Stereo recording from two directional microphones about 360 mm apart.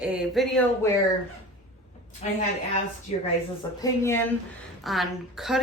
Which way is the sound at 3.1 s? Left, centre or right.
Centre.